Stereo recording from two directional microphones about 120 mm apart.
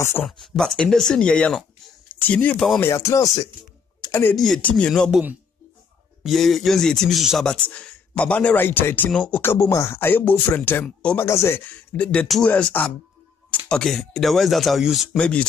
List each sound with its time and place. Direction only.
0.2 s speech: centre (ahead or behind); by 4.4 s 20° left (ahead or behind)
4.4 s speech: 10° left (ahead or behind)
6.2 s speech: centre (ahead or behind)
11.2 s speech: 20° left (ahead or behind); by 15.0 s centre (ahead or behind)
15.1 s speech: 10° left (ahead or behind)